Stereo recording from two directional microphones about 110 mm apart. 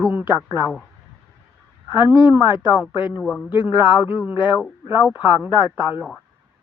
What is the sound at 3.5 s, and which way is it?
Speech, 50° left (ahead or behind).